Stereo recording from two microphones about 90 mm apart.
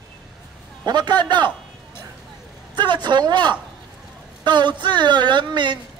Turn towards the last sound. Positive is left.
turn(degrees=-60)  # may be behind; listen again after turning